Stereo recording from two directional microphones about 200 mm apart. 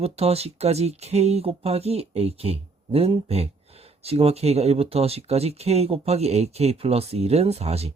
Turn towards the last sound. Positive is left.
turn(degrees=-30)  # may be behind; listen again after turning